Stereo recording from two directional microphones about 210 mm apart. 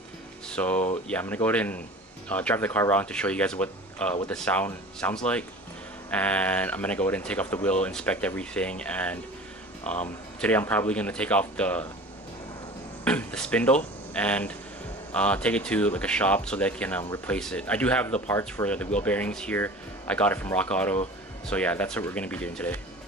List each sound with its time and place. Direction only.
0.5 s speech: 5° left (ahead or behind)
13.0 s speech: 5° left (ahead or behind)